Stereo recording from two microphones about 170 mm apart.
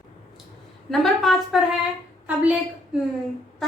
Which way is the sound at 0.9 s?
Centre (ahead or behind).